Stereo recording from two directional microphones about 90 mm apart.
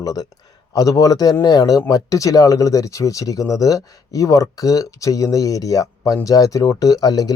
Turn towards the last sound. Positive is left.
turn(degrees=45)  # may be behind; listen again after turning